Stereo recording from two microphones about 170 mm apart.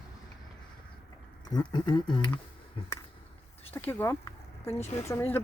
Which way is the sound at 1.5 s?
25° left (ahead or behind).